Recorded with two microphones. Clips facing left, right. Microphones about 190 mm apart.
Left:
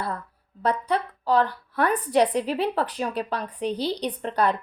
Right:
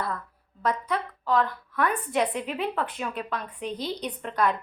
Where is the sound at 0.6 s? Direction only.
30° left (ahead or behind).